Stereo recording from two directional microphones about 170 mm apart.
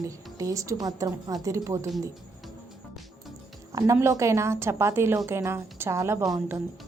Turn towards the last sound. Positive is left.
turn(degrees=-20)  # may be behind; listen again after turning